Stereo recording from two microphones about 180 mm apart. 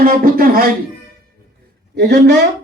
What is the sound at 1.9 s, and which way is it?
Speech, 65° right (ahead or behind).